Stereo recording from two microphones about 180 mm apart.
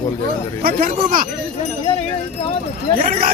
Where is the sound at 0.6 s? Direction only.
55° right (ahead or behind).